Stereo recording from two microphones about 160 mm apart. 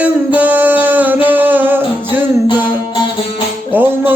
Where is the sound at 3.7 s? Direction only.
10° right (ahead or behind).